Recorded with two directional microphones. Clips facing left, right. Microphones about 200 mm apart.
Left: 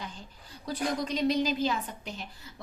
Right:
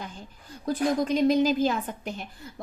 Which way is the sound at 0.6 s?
50° right (ahead or behind).